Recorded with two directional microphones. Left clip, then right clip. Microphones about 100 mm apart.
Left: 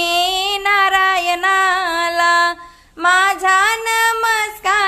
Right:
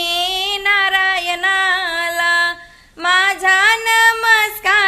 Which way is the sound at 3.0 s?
35° left (ahead or behind).